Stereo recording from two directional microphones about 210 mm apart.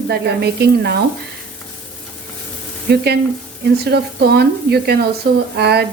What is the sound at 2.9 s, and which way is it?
Speech, 50° right (ahead or behind).